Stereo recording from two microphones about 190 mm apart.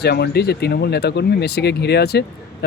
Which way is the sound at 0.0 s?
60° left (ahead or behind).